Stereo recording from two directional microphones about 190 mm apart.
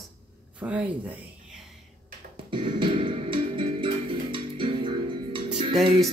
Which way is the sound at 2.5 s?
25° right (ahead or behind).